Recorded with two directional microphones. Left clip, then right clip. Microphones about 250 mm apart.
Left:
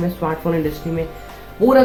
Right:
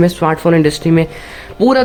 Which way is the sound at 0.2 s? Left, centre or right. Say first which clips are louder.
Right 9 dB; right.